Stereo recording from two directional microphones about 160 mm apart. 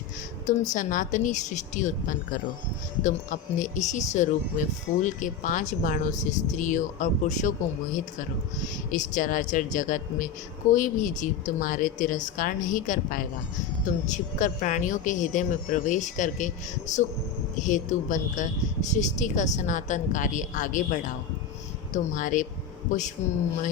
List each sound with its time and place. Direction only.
0.4 s speech: 50° left (ahead or behind)
8.9 s speech: 55° left (ahead or behind)
17.5 s speech: 50° left (ahead or behind)